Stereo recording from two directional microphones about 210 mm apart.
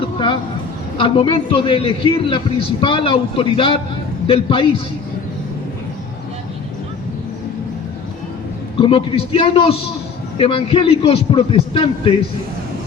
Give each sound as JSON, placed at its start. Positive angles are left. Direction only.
{"t": 0.9, "sound": "a man's voice", "side_deg": 25}
{"t": 8.7, "sound": "a man's voice", "side_deg": 25}